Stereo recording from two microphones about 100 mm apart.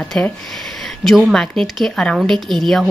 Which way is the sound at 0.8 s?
Centre (ahead or behind).